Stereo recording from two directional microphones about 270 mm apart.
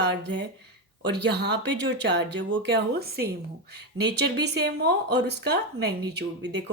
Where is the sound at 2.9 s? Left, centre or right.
Right.